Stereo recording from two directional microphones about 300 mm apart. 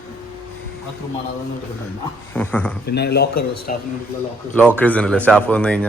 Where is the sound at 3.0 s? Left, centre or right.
Left.